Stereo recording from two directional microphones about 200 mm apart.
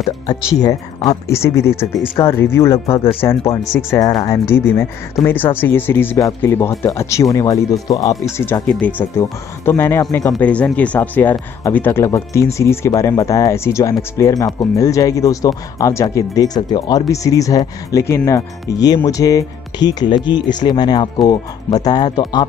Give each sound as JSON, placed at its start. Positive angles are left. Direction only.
{"t": 1.2, "sound": "speech", "side_deg": 15}